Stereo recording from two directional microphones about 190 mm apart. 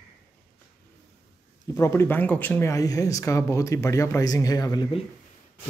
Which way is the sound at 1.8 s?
15° left (ahead or behind).